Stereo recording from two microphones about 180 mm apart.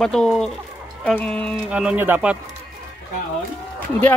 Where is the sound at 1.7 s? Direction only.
10° right (ahead or behind).